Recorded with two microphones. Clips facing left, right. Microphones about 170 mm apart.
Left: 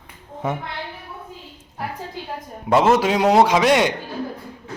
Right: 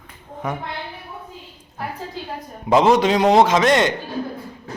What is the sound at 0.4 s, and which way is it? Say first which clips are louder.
Speech: left 2 dB; 25° left (ahead or behind).